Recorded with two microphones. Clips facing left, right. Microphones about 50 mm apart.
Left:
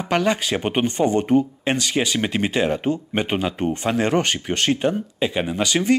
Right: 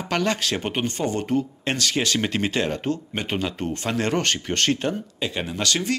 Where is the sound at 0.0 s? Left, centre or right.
Centre.